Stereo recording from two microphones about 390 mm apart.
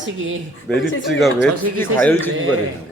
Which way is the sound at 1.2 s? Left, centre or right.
Centre.